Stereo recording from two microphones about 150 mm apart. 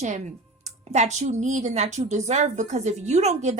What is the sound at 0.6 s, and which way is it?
Speech, 50° right (ahead or behind).